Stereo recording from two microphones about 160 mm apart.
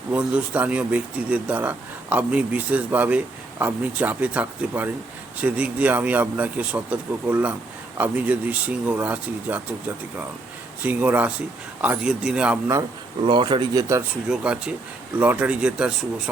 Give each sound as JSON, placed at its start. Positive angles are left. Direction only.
{"t": 0.1, "sound": "speech", "side_deg": -5}
{"t": 10.8, "sound": "speech", "side_deg": -10}
{"t": 13.2, "sound": "speech", "side_deg": -30}
{"t": 14.3, "sound": "speech", "side_deg": -5}